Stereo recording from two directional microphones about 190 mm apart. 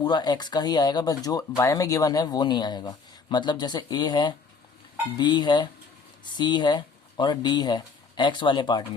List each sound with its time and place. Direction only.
0.0 s speech: 20° left (ahead or behind)